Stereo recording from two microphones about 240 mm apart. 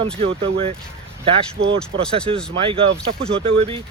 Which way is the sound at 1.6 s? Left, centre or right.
Right.